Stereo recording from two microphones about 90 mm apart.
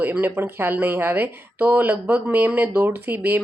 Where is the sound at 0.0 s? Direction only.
20° right (ahead or behind).